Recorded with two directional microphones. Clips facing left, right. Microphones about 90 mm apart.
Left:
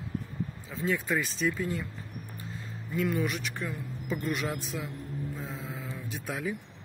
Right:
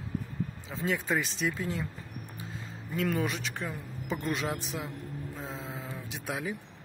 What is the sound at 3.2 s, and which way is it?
Speech, 30° right (ahead or behind).